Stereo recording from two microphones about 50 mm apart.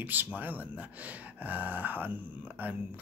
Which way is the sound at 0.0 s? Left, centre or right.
Right.